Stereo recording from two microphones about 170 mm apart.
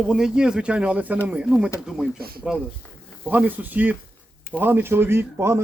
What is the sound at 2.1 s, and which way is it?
Speech, 65° right (ahead or behind).